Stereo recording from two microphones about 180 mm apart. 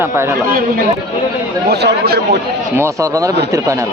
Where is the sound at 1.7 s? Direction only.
65° right (ahead or behind).